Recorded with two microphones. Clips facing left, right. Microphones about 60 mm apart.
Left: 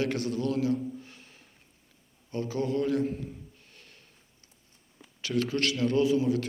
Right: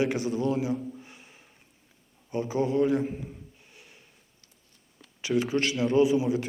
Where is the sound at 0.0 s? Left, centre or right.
Centre.